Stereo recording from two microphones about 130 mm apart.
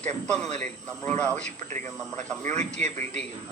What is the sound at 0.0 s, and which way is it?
A man's voice, 10° left (ahead or behind).